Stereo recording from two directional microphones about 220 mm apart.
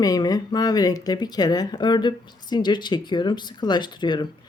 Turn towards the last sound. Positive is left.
turn(degrees=20)  # may be behind; listen again after turning